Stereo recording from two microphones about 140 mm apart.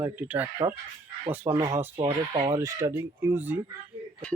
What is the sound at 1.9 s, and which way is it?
Speech, 40° right (ahead or behind).